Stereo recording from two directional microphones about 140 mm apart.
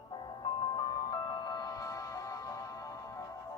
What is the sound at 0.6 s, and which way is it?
Music, 30° left (ahead or behind).